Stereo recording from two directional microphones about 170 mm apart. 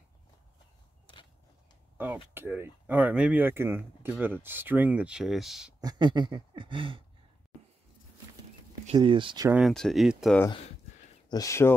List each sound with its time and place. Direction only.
2.3 s speech: 15° right (ahead or behind)
5.8 s speech: 25° right (ahead or behind)
8.9 s speech: 30° right (ahead or behind)
9.5 s speech: centre (ahead or behind)
11.2 s speech: 20° left (ahead or behind)